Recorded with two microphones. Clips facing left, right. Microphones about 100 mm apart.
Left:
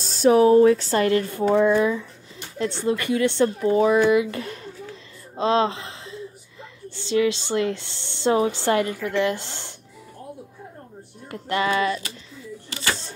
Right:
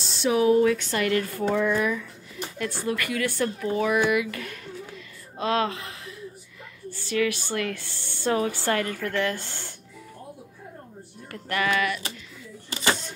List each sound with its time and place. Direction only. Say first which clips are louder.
0.0 s speech: left 6 dB; 40° left (ahead or behind)
5.3 s a sound: left 5 dB; 25° left (ahead or behind)
6.9 s speech: left 4 dB; 25° left (ahead or behind)
11.2 s speech: left 3 dB; 25° left (ahead or behind)